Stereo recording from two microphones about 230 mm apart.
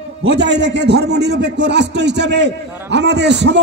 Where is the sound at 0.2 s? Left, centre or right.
Right.